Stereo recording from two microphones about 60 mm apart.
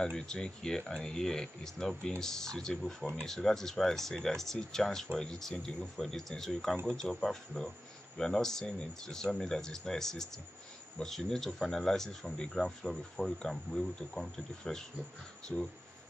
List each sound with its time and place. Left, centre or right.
0.0 s speech: centre